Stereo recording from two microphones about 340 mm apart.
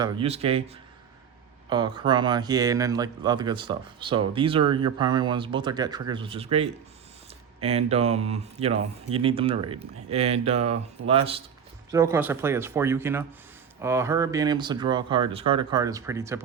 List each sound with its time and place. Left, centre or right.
0.0 s speech: centre
1.7 s speech: centre